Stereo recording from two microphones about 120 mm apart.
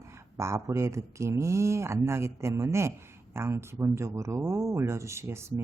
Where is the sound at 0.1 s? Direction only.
25° right (ahead or behind).